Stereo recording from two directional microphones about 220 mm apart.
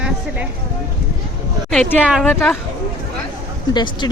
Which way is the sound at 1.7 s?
5° left (ahead or behind).